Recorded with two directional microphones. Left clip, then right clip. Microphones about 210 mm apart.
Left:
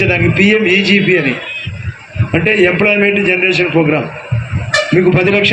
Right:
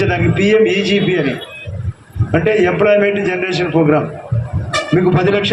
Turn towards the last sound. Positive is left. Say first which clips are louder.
# left 3 dB
turn(degrees=-55)  # may be behind; listen again after turning